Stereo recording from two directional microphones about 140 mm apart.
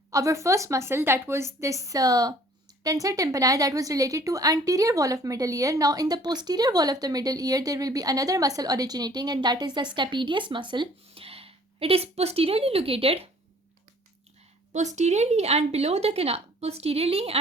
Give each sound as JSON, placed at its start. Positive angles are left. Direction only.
{"t": 0.1, "sound": "speech", "side_deg": -20}
{"t": 14.7, "sound": "speech", "side_deg": -55}